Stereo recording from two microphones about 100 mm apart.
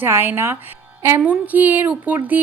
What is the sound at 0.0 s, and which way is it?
Speech, 20° right (ahead or behind).